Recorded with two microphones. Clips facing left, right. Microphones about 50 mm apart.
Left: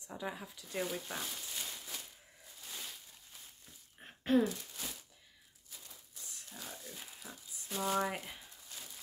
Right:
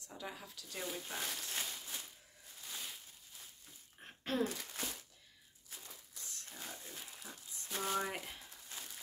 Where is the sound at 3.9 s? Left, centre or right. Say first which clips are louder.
Left 9 dB; centre.